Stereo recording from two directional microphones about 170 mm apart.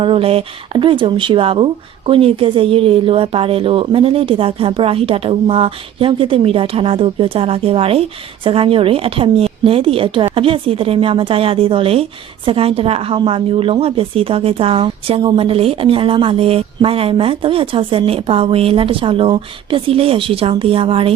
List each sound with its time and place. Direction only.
0.0 s speech: 30° right (ahead or behind)